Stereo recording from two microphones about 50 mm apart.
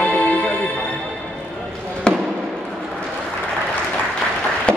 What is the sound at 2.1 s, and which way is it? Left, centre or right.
Basketball bounce, centre.